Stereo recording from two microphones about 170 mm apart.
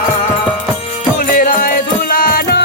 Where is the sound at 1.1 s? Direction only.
55° left (ahead or behind).